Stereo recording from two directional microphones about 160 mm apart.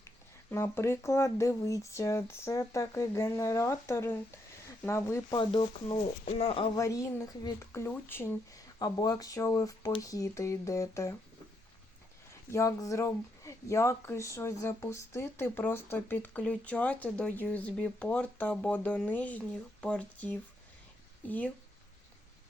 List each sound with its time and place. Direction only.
0.5 s speech: 15° left (ahead or behind)
5.4 s speech: 30° left (ahead or behind)
6.2 s speech: 40° left (ahead or behind)
6.7 s speech: 20° left (ahead or behind)
12.3 s speech: 20° left (ahead or behind)